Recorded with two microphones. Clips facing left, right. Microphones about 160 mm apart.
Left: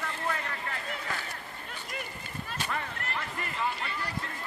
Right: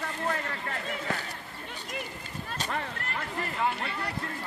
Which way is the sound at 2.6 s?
40° right (ahead or behind).